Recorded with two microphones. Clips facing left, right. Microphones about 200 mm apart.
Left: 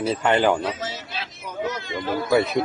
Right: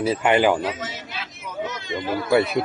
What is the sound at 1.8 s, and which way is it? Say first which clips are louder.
Speech: even; 15° right (ahead or behind).